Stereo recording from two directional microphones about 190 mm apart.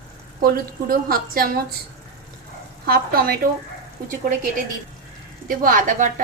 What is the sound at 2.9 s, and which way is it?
Speech, 50° right (ahead or behind).